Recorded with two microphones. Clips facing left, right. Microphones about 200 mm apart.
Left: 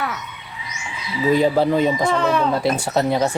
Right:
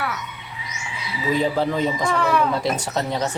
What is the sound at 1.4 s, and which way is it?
Speech, 15° left (ahead or behind).